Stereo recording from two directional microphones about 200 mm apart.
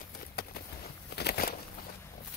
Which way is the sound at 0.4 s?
50° left (ahead or behind).